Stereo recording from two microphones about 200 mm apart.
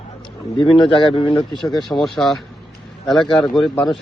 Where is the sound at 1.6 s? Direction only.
Centre (ahead or behind).